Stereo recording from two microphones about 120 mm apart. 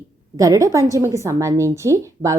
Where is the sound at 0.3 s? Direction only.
30° right (ahead or behind).